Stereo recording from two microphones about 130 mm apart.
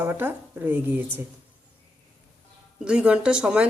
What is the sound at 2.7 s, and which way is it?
Speech, 5° right (ahead or behind).